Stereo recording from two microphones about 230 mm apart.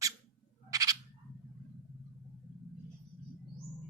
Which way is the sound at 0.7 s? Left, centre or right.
Centre.